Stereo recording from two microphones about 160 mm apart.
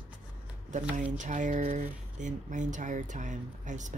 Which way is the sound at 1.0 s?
50° right (ahead or behind).